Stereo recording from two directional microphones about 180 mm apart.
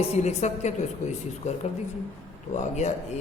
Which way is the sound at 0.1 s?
40° left (ahead or behind).